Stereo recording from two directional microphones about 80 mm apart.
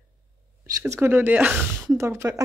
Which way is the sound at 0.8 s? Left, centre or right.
Right.